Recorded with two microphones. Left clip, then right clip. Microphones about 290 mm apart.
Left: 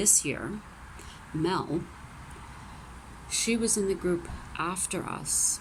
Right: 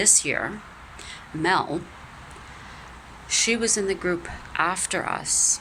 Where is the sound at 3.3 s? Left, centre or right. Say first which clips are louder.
Right 8 dB; centre.